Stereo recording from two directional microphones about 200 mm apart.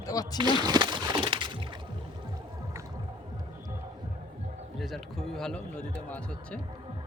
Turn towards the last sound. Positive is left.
turn(degrees=5)  # may be behind; listen again after turning